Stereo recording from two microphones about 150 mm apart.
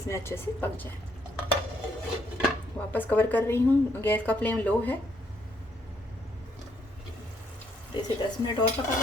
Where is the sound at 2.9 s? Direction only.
10° left (ahead or behind).